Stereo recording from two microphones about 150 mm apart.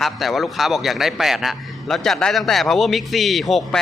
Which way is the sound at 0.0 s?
Centre (ahead or behind).